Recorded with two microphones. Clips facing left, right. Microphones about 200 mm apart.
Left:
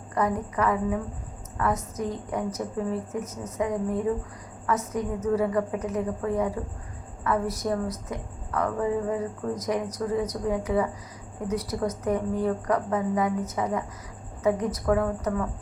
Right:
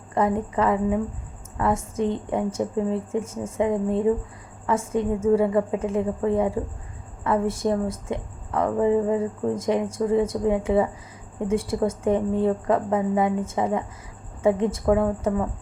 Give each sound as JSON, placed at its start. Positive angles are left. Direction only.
{"t": 0.1, "sound": "speech", "side_deg": -25}